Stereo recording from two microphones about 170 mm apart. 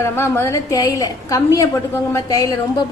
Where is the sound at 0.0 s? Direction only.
15° left (ahead or behind).